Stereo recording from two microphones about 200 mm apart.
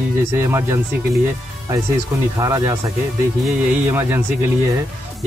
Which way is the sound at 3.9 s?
10° right (ahead or behind).